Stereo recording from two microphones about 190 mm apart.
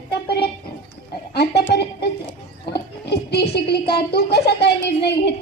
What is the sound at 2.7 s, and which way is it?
Music, 60° left (ahead or behind).